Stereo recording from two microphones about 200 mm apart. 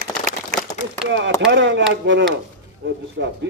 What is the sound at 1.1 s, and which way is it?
A man's voice, 65° right (ahead or behind).